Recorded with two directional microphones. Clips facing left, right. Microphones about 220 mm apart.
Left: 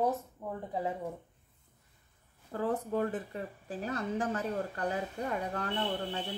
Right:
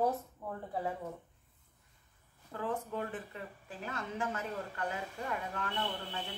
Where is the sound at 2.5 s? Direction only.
40° left (ahead or behind).